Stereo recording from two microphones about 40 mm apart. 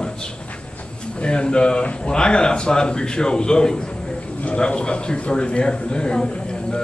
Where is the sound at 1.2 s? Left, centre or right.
Left.